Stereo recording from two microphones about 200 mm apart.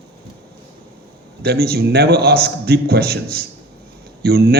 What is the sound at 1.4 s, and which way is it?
A man's voice, 50° right (ahead or behind).